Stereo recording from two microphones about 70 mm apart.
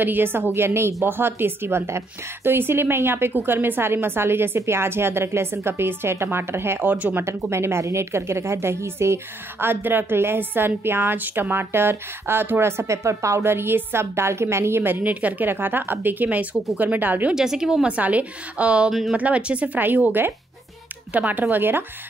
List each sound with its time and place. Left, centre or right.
0.0 s a woman's voice: right
7.2 s a woman's voice: right
17.3 s a woman's voice: centre
18.9 s speech: centre
19.1 s speech: centre